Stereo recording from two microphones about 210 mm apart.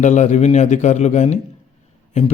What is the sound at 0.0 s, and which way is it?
Speech, 35° left (ahead or behind).